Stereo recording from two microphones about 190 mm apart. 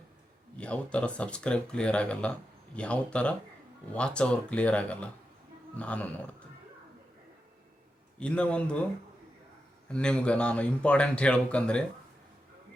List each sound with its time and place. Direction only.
0.6 s speech: 5° left (ahead or behind)
8.2 s speech: 5° left (ahead or behind)
9.9 s speech: 5° left (ahead or behind)